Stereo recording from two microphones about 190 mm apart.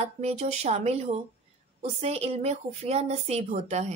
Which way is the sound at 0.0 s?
35° right (ahead or behind).